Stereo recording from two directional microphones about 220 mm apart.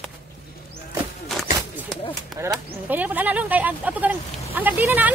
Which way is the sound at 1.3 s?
Centre (ahead or behind).